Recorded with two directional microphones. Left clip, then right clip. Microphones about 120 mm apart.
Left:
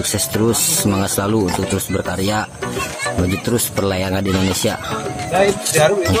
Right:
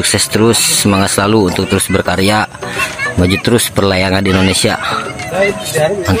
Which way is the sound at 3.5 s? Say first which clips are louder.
Right 7 dB; 25° right (ahead or behind).